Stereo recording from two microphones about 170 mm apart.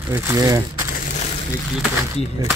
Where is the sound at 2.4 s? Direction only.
20° right (ahead or behind).